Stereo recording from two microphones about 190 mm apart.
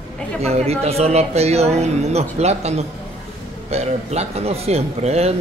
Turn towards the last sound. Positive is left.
turn(degrees=-35)  # may be behind; listen again after turning